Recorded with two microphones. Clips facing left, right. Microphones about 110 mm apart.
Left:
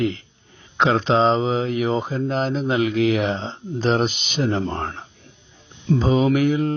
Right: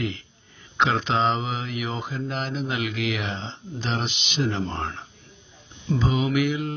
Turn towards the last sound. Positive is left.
turn(degrees=40)  # may be behind; listen again after turning